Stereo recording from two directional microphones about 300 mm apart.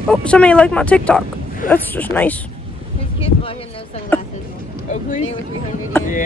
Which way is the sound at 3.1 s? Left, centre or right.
Centre.